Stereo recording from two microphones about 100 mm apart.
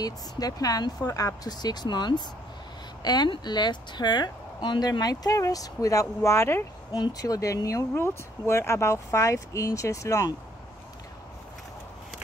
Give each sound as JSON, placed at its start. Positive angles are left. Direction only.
{"t": 0.0, "sound": "speech", "side_deg": 40}
{"t": 6.9, "sound": "speech", "side_deg": 40}